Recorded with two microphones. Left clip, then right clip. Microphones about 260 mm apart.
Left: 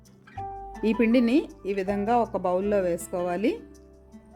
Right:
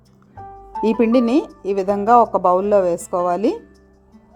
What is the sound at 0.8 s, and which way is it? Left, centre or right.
Speech, centre.